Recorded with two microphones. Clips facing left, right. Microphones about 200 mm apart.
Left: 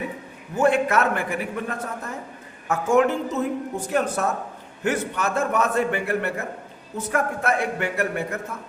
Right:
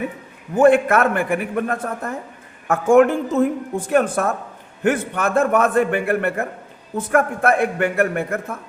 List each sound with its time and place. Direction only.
0.5 s a man's voice: 55° right (ahead or behind)